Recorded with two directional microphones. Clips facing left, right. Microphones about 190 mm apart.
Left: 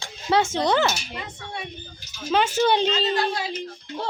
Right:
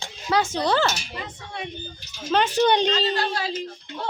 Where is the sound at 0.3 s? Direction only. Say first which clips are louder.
Left 1 dB; 25° left (ahead or behind).